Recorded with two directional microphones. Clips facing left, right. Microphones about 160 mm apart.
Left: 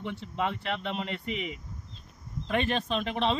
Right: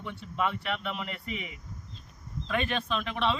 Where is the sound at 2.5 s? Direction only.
30° left (ahead or behind).